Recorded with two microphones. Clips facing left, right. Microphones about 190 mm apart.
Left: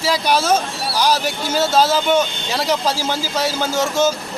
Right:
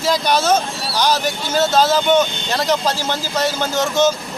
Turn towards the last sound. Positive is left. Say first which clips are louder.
# right 1 dB
turn(degrees=5)  # may be behind; listen again after turning